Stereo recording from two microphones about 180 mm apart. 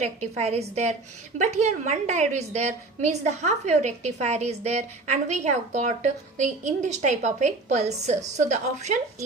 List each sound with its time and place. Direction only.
0.0 s a woman's voice: 40° right (ahead or behind)